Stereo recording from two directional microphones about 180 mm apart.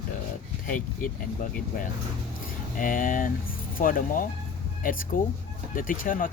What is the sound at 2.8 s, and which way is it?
Speech, 50° left (ahead or behind).